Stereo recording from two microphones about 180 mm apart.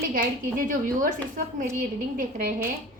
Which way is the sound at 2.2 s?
50° right (ahead or behind).